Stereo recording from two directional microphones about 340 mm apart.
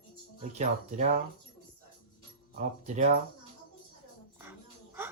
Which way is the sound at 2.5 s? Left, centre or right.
Right.